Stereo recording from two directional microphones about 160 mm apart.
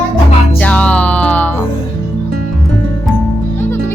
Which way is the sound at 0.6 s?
10° left (ahead or behind).